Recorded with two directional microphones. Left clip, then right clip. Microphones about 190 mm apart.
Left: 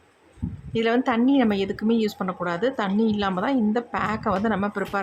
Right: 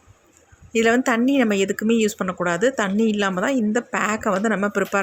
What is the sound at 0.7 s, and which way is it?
A woman's voice, 15° right (ahead or behind).